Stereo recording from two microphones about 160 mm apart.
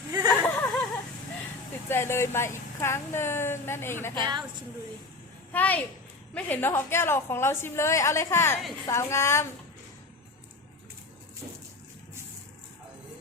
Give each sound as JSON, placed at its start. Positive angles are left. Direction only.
{"t": 0.3, "sound": "a sound", "side_deg": 10}
{"t": 1.9, "sound": "speech", "side_deg": 15}
{"t": 5.5, "sound": "a child's voice", "side_deg": 10}